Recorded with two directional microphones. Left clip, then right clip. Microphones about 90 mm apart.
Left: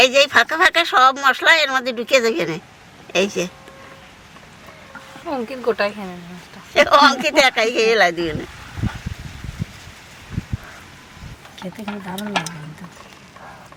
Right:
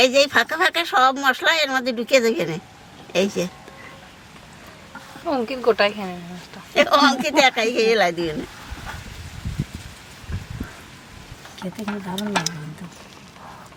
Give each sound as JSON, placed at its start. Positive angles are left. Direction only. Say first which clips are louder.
{"t": 0.0, "sound": "speech", "louder": "left 3 dB", "side_deg": 15}
{"t": 5.2, "sound": "speech", "louder": "right 2 dB", "side_deg": -30}
{"t": 6.7, "sound": "speech", "louder": "left 4 dB", "side_deg": 15}